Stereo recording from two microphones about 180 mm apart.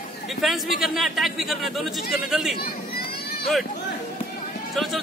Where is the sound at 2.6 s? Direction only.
60° left (ahead or behind).